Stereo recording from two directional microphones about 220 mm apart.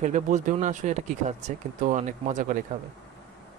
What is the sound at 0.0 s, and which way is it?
Speech, 35° right (ahead or behind).